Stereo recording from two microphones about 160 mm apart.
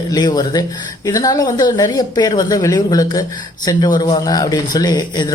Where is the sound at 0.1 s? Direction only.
25° left (ahead or behind).